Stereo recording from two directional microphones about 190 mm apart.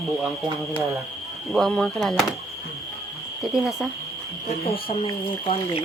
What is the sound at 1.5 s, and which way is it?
Speech, centre (ahead or behind).